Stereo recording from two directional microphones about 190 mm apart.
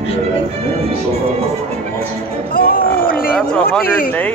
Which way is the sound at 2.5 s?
50° left (ahead or behind).